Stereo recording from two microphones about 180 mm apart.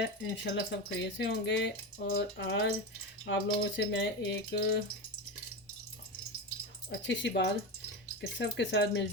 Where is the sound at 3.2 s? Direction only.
90° left.